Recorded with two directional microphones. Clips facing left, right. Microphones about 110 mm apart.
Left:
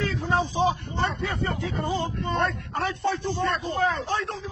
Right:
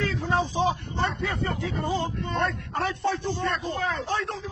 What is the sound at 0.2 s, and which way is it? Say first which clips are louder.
Speech: left 2 dB; 5° left (ahead or behind).